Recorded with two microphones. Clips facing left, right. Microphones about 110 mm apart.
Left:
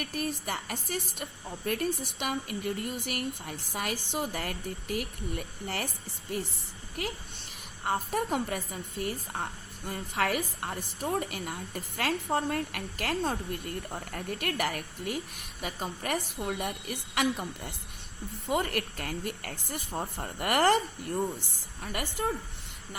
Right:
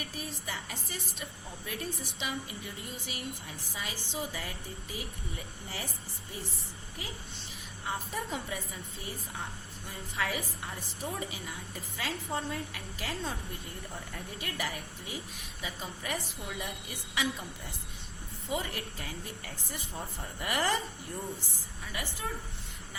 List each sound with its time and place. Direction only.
0.0 s a woman's voice: 60° left (ahead or behind)
7.9 s a woman's voice: 55° left (ahead or behind)
18.4 s a woman's voice: 60° left (ahead or behind)
22.2 s a woman's voice: 50° left (ahead or behind)